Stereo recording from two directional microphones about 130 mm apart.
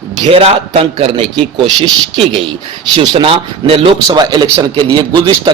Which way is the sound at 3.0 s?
40° right (ahead or behind).